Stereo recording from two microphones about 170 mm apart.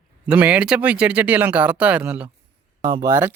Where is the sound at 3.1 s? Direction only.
15° right (ahead or behind).